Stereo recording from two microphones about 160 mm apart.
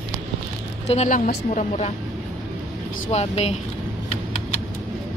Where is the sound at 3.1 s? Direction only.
40° left (ahead or behind).